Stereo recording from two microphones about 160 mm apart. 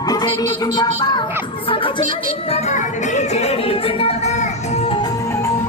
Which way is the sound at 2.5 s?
50° left (ahead or behind).